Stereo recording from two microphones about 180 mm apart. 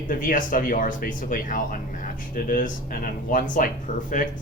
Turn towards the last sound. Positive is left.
turn(degrees=45)  # may be behind; listen again after turning